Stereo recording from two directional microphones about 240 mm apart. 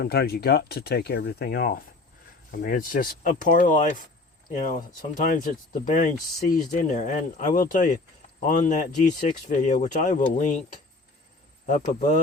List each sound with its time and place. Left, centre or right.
0.0 s speech: left
5.1 s speech: left
11.6 s speech: left